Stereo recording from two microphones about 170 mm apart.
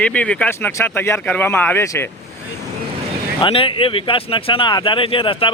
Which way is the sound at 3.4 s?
30° left (ahead or behind).